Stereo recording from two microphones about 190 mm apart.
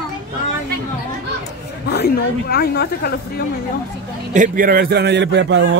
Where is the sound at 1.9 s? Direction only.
55° left (ahead or behind).